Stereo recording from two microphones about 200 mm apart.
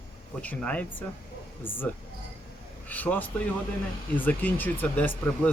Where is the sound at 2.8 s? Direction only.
10° left (ahead or behind).